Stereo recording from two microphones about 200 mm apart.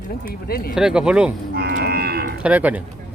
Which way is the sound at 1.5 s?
55° right (ahead or behind).